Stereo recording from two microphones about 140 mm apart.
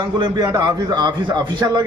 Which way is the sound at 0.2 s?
30° right (ahead or behind).